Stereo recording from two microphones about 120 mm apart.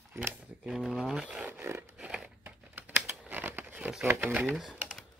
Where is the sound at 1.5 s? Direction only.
20° right (ahead or behind).